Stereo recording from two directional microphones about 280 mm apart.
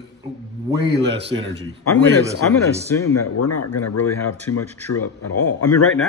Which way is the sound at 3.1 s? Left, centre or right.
Left.